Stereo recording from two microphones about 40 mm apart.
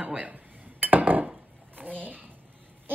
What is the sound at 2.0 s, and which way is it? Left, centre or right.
Speech, right.